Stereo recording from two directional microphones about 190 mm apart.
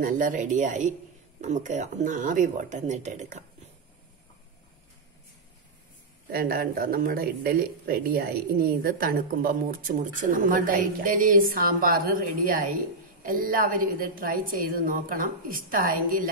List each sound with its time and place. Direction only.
0.0 s speech: 45° right (ahead or behind)
6.3 s speech: 50° right (ahead or behind)